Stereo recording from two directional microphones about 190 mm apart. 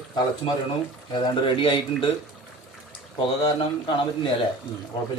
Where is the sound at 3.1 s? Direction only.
25° left (ahead or behind).